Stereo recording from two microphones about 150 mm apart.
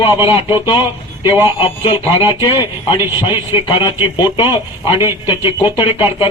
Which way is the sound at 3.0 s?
15° right (ahead or behind).